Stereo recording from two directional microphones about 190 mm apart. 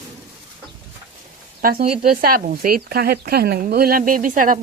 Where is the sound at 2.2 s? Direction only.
50° right (ahead or behind).